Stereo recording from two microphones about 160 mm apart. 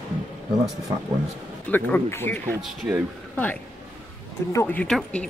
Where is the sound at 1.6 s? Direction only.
10° left (ahead or behind).